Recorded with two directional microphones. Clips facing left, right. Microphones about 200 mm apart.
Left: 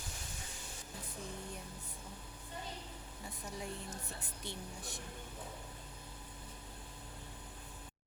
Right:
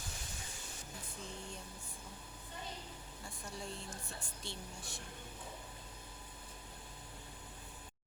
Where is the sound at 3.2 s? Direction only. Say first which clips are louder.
Left 2 dB; 15° left (ahead or behind).